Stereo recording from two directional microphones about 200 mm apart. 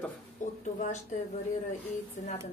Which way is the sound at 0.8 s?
35° left (ahead or behind).